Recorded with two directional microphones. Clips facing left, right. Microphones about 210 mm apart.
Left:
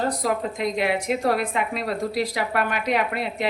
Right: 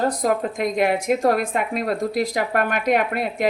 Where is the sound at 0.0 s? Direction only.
50° right (ahead or behind).